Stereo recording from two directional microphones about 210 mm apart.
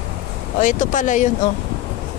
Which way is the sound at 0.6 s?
35° left (ahead or behind).